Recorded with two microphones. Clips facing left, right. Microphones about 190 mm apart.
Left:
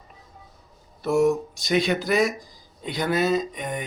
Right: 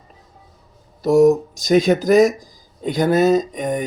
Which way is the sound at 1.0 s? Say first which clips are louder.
Right 8 dB; 40° right (ahead or behind).